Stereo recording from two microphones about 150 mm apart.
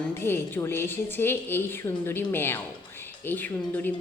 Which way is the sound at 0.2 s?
15° left (ahead or behind).